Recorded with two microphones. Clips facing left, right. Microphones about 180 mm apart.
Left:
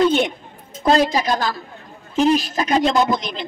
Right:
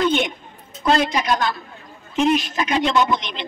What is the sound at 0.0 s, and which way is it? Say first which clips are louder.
A woman's voice: left 3 dB; 35° left (ahead or behind).